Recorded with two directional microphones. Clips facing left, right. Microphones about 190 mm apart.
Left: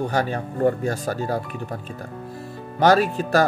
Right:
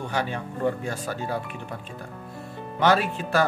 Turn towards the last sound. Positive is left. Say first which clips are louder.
# left 5 dB
turn(degrees=40)  # may be behind; listen again after turning